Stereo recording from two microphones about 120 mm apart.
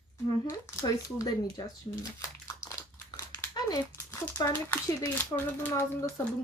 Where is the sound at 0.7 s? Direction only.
25° left (ahead or behind).